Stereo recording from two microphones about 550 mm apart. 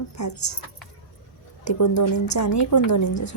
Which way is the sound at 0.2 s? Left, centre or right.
Left.